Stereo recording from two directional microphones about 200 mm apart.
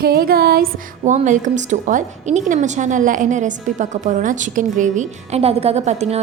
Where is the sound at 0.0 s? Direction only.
50° right (ahead or behind).